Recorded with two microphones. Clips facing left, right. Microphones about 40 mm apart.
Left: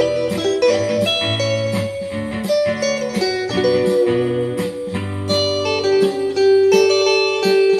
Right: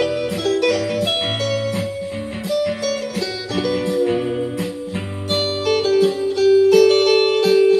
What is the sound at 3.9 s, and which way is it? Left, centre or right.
Music, centre.